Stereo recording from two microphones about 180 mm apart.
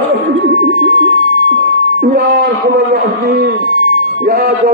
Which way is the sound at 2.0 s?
60° right (ahead or behind).